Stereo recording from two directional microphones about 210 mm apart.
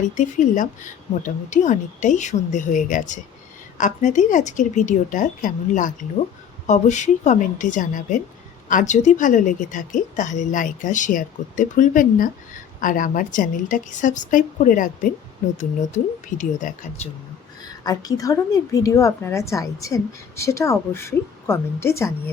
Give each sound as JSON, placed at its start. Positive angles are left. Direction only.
{"t": 0.2, "sound": "a woman's voice", "side_deg": 35}
{"t": 17.8, "sound": "a woman's voice", "side_deg": 15}